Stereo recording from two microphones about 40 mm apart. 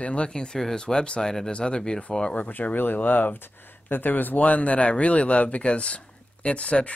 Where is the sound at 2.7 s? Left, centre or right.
Left.